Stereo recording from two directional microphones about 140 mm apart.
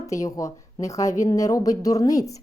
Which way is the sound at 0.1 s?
25° left (ahead or behind).